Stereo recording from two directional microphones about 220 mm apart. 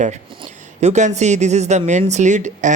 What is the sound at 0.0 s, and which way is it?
Speech, 25° right (ahead or behind).